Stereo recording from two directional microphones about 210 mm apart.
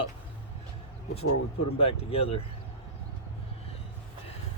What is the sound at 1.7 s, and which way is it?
Speech, 30° left (ahead or behind).